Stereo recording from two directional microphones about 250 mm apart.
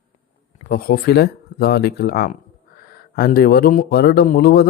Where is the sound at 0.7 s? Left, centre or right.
Left.